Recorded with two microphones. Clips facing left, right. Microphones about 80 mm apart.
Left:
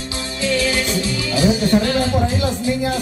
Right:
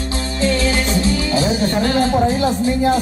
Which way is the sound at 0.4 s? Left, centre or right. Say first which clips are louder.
Right 1 dB; right.